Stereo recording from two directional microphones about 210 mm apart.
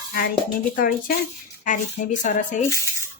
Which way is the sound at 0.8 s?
40° left (ahead or behind).